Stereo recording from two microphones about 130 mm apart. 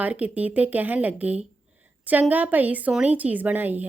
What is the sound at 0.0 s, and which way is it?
A woman's voice, 10° right (ahead or behind).